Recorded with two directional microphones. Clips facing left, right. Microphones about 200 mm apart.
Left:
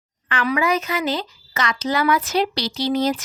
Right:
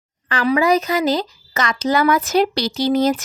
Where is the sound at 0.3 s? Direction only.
35° right (ahead or behind).